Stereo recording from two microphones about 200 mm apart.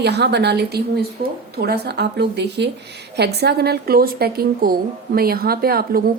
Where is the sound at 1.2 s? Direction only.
40° right (ahead or behind).